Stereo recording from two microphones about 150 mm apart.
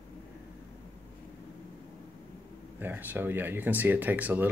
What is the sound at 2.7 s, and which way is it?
Speech, 15° right (ahead or behind).